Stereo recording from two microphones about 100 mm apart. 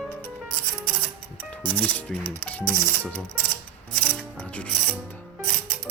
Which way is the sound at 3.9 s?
15° left (ahead or behind).